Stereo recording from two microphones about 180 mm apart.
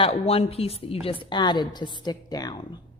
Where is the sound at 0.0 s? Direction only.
35° left (ahead or behind).